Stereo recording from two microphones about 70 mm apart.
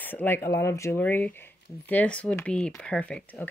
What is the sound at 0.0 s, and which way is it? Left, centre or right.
Speech, left.